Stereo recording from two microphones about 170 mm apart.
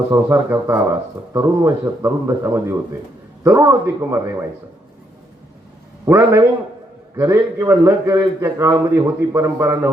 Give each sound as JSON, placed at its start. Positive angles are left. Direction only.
{"t": 0.1, "sound": "a man's voice", "side_deg": -15}
{"t": 6.1, "sound": "a man's voice", "side_deg": -20}